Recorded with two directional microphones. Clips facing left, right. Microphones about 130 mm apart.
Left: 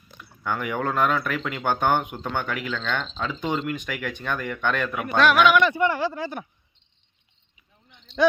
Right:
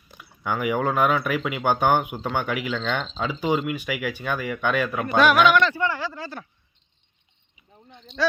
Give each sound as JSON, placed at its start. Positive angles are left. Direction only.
{"t": 0.1, "sound": "speech", "side_deg": -10}
{"t": 5.6, "sound": "speech", "side_deg": 20}
{"t": 7.7, "sound": "speech", "side_deg": -50}